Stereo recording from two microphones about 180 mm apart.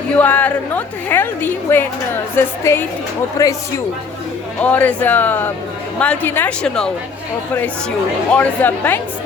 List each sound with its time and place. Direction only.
0.2 s a woman's voice: 10° left (ahead or behind)
4.6 s a woman's voice: 10° left (ahead or behind)
8.3 s a woman's voice: 10° left (ahead or behind)